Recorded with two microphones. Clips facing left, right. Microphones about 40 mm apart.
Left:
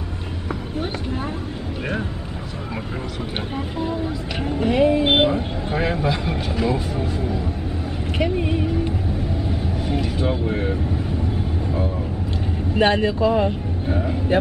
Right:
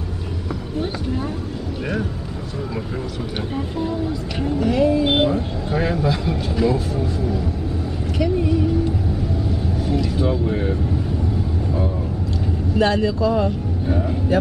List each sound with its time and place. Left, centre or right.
3.5 s speech: centre
4.6 s speech: left
9.8 s vehicle: left
10.4 s speech: centre
12.7 s speech: left
13.8 s speech: centre